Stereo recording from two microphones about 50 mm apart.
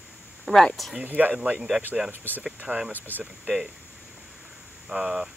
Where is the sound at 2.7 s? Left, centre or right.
Right.